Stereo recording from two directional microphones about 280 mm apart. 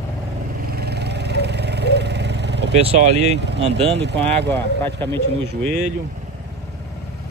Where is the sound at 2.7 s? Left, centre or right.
Right.